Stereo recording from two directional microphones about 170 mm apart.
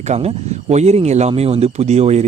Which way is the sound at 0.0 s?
40° right (ahead or behind).